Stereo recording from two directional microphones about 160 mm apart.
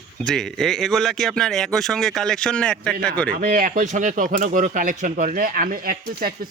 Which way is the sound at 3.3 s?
60° right (ahead or behind).